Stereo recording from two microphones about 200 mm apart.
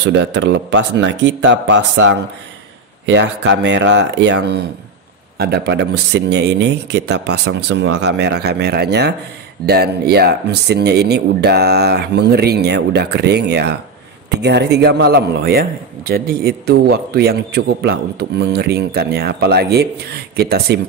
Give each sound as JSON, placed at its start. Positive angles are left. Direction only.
{"t": 0.0, "sound": "a man's voice", "side_deg": -60}